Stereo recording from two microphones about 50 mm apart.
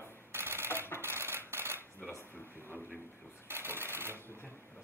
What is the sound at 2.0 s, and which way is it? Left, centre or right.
Speech, left.